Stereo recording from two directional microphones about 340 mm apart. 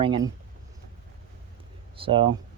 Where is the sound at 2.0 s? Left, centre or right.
Centre.